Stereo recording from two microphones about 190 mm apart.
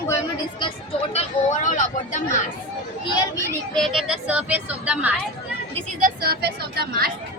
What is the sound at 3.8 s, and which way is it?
Speech, centre (ahead or behind).